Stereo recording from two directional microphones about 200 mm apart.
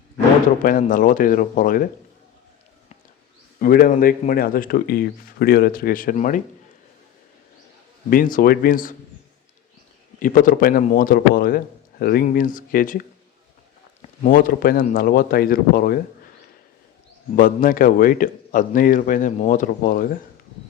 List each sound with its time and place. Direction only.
0.6 s a man's voice: 45° left (ahead or behind)
3.6 s a man's voice: 45° left (ahead or behind)
8.1 s a man's voice: 45° left (ahead or behind)
10.2 s a man's voice: 40° left (ahead or behind)
14.3 s a man's voice: 45° left (ahead or behind)
17.3 s a man's voice: 45° left (ahead or behind)